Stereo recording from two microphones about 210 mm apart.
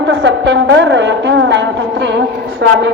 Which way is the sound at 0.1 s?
60° right (ahead or behind).